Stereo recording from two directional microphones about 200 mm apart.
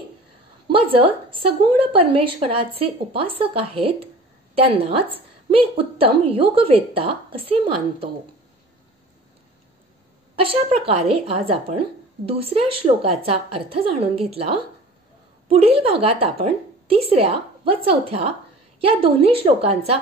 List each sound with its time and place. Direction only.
0.7 s a woman's voice: 25° right (ahead or behind)
10.3 s a woman's voice: 25° right (ahead or behind)